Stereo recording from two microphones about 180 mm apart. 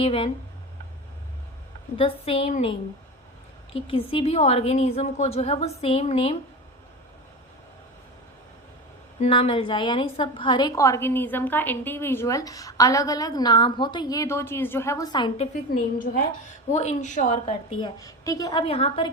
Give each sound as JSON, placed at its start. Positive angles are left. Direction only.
{"t": 0.0, "sound": "a woman's voice", "side_deg": 30}
{"t": 2.0, "sound": "a woman's voice", "side_deg": 30}
{"t": 9.2, "sound": "a woman's voice", "side_deg": 30}
{"t": 16.0, "sound": "a woman's voice", "side_deg": 50}
{"t": 16.7, "sound": "a woman's voice", "side_deg": 40}
{"t": 17.7, "sound": "a woman's voice", "side_deg": 20}
{"t": 18.6, "sound": "a woman's voice", "side_deg": 30}